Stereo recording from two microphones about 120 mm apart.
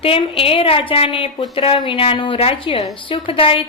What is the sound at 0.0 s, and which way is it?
A woman's voice, 50° left (ahead or behind).